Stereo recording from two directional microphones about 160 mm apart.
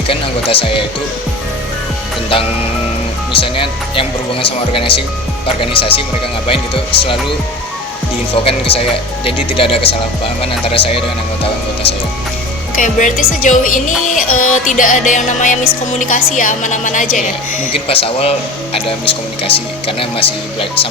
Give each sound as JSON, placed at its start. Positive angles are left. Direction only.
{"t": 0.1, "sound": "speech", "side_deg": 35}
{"t": 2.3, "sound": "speech", "side_deg": 35}
{"t": 8.4, "sound": "speech", "side_deg": 35}
{"t": 12.7, "sound": "a woman's voice", "side_deg": 55}
{"t": 17.7, "sound": "speech", "side_deg": 35}